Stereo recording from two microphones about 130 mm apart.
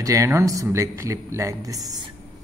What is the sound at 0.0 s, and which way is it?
Speech, 25° right (ahead or behind).